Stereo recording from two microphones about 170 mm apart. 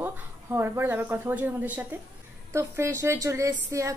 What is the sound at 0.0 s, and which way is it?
A woman's voice, 15° right (ahead or behind).